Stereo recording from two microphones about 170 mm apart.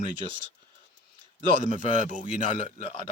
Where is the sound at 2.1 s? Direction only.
45° right (ahead or behind).